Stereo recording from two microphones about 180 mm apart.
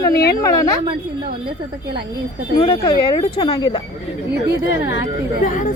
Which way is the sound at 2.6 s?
25° left (ahead or behind).